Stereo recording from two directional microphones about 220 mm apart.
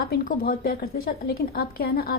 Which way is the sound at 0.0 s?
40° left (ahead or behind).